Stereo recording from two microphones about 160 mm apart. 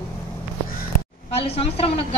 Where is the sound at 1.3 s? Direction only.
40° left (ahead or behind).